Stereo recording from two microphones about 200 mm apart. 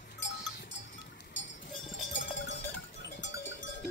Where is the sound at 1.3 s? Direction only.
65° left (ahead or behind).